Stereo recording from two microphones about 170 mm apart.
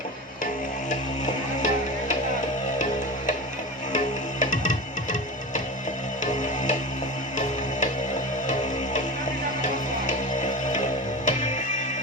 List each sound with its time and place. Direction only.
0.9 s music: 45° left (ahead or behind)
3.9 s music: 45° left (ahead or behind)
6.2 s music: 45° left (ahead or behind)
11.3 s music: 45° left (ahead or behind)